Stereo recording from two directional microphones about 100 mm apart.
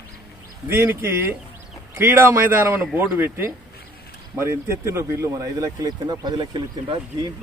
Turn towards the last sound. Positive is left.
turn(degrees=-45)  # may be behind; listen again after turning